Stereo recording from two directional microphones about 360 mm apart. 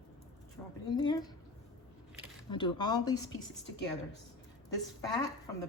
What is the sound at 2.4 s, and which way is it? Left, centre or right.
Speech, centre.